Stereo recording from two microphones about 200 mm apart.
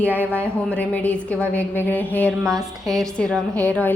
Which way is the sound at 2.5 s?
20° right (ahead or behind).